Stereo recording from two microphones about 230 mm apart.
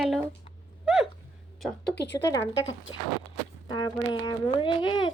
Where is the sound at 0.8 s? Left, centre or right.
Centre.